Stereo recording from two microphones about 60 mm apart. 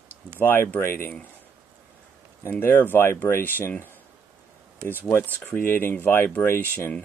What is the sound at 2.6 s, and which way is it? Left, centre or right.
Speech, left.